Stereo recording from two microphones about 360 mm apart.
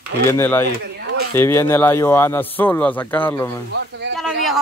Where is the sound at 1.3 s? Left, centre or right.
Centre.